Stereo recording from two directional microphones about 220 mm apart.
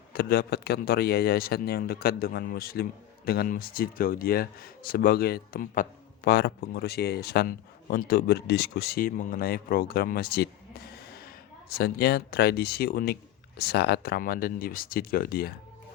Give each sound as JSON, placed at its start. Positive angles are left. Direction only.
{"t": 0.1, "sound": "speech", "side_deg": 45}